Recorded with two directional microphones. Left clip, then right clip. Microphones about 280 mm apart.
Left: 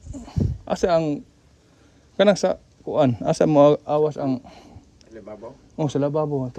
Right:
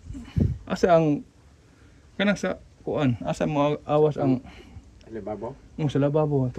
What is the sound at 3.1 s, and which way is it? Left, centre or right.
Speech, left.